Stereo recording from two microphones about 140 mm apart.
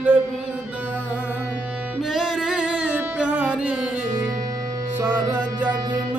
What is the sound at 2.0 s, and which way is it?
Music, 5° right (ahead or behind).